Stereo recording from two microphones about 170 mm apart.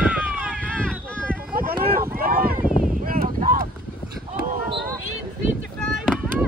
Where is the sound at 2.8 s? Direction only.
50° right (ahead or behind).